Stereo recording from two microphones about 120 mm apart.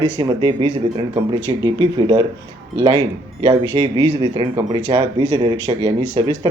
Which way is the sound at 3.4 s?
40° right (ahead or behind).